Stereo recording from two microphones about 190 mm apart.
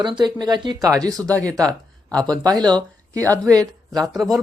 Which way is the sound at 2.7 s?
15° right (ahead or behind).